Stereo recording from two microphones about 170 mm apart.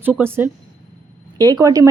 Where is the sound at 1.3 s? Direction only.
25° right (ahead or behind).